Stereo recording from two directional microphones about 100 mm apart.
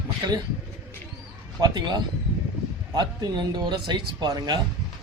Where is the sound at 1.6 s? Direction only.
45° right (ahead or behind).